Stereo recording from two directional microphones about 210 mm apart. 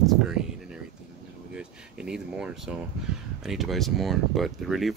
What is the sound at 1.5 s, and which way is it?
Air conditioning, 5° right (ahead or behind).